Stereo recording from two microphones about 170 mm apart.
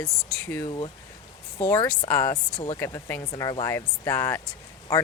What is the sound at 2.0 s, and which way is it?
Speech, 15° left (ahead or behind).